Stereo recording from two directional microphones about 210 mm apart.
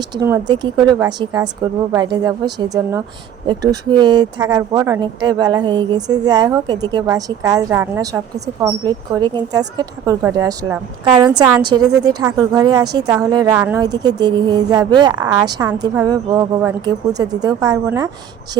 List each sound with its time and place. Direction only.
0.2 s speech: 15° right (ahead or behind)